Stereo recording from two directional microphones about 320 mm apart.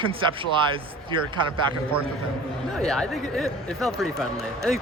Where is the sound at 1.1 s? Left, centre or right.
Centre.